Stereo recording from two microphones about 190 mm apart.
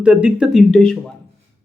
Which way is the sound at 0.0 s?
5° right (ahead or behind).